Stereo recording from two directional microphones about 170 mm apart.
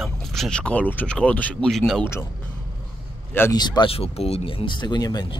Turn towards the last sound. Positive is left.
turn(degrees=20)  # may be behind; listen again after turning